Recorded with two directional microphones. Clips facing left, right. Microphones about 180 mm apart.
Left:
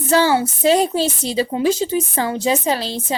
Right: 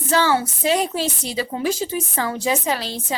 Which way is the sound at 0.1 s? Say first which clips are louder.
Left 3 dB; 30° left (ahead or behind).